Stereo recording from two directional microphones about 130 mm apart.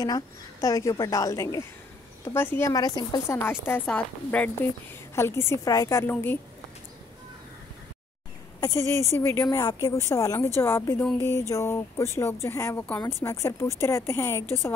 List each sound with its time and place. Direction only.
0.0 s a woman's voice: 25° left (ahead or behind)
2.7 s a woman's voice: 30° left (ahead or behind)
3.3 s speech: 20° left (ahead or behind)
5.1 s a woman's voice: 20° left (ahead or behind)
8.5 s a woman's voice: 25° left (ahead or behind)